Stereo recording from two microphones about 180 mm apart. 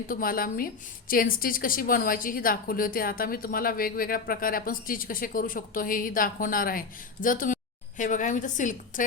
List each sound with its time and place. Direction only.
0.1 s a woman's voice: 50° left (ahead or behind)